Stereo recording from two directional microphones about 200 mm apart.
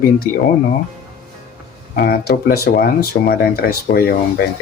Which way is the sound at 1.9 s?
50° left (ahead or behind).